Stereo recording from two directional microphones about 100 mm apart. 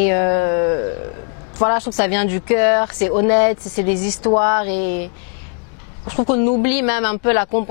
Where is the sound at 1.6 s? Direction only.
15° left (ahead or behind).